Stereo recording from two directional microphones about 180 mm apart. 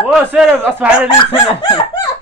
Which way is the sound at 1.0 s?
30° left (ahead or behind).